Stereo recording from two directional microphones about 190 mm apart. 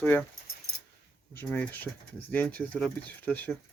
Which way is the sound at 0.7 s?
55° left (ahead or behind).